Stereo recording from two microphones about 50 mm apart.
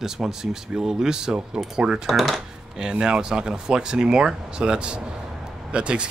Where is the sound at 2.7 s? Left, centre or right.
Centre.